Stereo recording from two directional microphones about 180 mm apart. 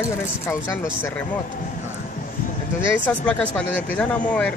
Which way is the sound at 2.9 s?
10° left (ahead or behind).